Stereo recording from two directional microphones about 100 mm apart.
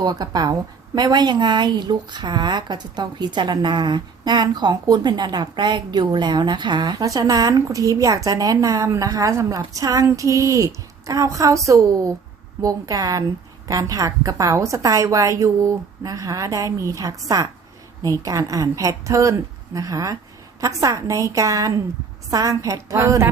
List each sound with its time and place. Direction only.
0.0 s a woman's voice: 45° right (ahead or behind); by 23.3 s 25° right (ahead or behind)